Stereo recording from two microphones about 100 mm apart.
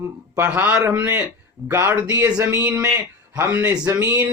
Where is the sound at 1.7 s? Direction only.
30° right (ahead or behind).